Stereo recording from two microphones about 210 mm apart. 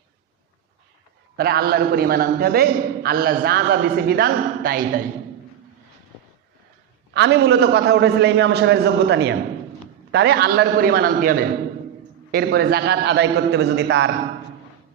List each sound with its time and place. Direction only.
1.4 s a man's voice: 50° right (ahead or behind)
7.1 s a man's voice: 50° right (ahead or behind)